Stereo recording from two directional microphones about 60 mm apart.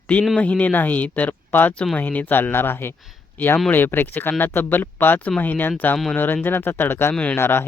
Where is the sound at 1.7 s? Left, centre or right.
Centre.